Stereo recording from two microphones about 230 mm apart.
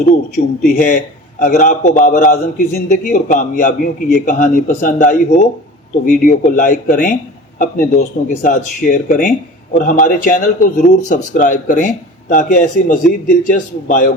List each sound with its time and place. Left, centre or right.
0.3 s a man's voice: left